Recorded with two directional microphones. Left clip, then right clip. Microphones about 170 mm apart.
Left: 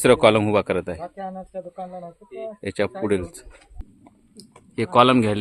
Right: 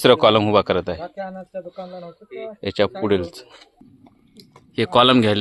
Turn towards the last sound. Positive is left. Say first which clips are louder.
# right 2 dB
turn(degrees=-10)  # may be behind; listen again after turning